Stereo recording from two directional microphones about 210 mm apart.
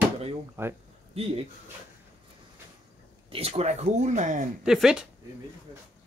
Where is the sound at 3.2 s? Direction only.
30° right (ahead or behind).